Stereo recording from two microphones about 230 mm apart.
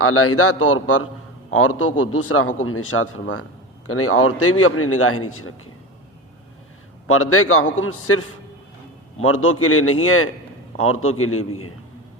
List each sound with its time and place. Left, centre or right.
0.0 s a man's voice: left
7.1 s a man's voice: left
9.2 s a man's voice: left